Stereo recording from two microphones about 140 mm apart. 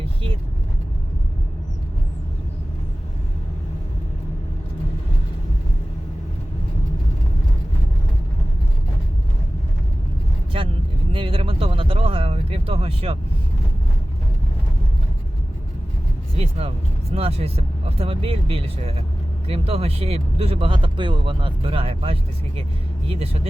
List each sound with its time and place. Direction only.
0.0 s vehicle: 40° right (ahead or behind)
11.1 s a sound: 40° right (ahead or behind)
16.4 s speech: 45° right (ahead or behind)